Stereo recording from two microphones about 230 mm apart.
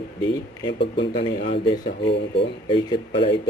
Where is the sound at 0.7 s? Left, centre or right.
Left.